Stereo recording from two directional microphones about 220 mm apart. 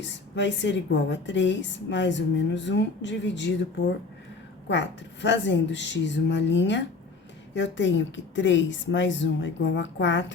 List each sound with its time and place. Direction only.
0.0 s a woman's voice: 55° left (ahead or behind)